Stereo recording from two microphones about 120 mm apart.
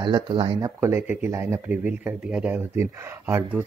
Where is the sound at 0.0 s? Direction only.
45° right (ahead or behind).